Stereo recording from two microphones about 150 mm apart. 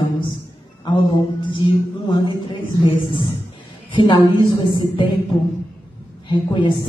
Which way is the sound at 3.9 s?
30° left (ahead or behind).